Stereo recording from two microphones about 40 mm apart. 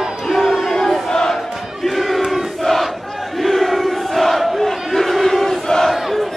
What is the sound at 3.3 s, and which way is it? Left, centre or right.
Crowd, centre.